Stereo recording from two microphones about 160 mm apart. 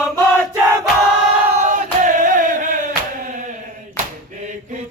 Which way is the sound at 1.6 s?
50° right (ahead or behind).